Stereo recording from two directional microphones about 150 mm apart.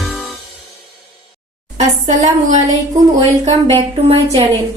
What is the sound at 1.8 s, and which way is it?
Speech, 50° right (ahead or behind).